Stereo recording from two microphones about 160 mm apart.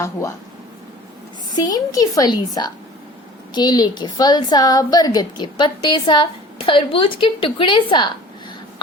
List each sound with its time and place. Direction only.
0.0 s a woman's voice: 20° left (ahead or behind)
1.5 s a woman's voice: 25° left (ahead or behind)